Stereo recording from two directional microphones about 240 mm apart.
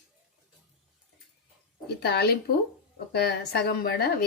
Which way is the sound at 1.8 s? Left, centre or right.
Left.